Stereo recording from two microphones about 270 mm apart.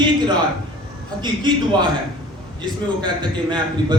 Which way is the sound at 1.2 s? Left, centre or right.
Centre.